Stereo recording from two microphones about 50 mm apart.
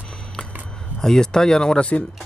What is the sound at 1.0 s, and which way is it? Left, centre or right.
Speech, centre.